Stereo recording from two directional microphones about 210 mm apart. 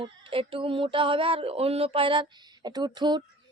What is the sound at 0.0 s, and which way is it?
Speech, 25° right (ahead or behind).